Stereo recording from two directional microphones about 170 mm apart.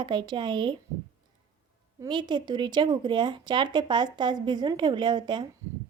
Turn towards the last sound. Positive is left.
turn(degrees=-25)  # may be behind; listen again after turning